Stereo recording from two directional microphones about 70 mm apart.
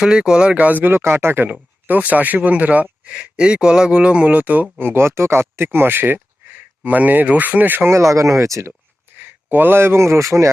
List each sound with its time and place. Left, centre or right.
0.0 s speech: centre
7.9 s speech: right
9.1 s speech: right